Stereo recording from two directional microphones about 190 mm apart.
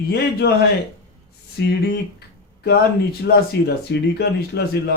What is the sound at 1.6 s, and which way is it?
Speech, 60° left (ahead or behind).